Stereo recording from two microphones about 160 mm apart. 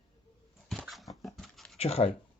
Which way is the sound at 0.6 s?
Centre (ahead or behind).